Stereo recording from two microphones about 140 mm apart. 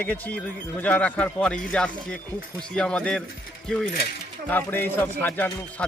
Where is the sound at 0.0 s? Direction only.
10° left (ahead or behind).